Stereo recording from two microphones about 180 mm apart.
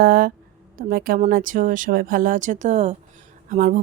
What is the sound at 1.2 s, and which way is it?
A woman's voice, 50° right (ahead or behind).